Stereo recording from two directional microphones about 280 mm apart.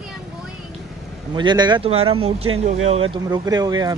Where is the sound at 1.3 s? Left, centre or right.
Centre.